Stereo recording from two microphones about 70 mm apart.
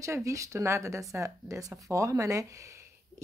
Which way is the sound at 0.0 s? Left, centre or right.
Right.